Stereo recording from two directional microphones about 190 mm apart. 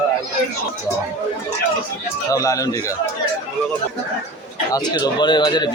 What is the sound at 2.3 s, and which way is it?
Speech, 15° left (ahead or behind).